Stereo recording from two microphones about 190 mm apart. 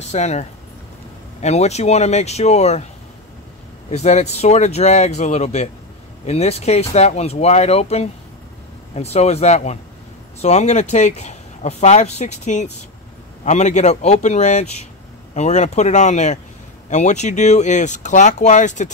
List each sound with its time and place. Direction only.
0.1 s speech: 35° left (ahead or behind)
3.9 s speech: 35° left (ahead or behind)